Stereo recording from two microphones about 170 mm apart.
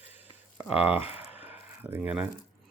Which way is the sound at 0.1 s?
10° right (ahead or behind).